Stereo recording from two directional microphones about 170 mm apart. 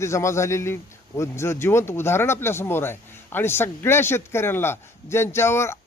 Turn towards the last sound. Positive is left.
turn(degrees=15)  # may be behind; listen again after turning